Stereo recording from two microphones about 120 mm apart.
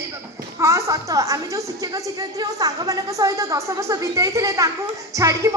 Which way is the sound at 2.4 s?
30° right (ahead or behind).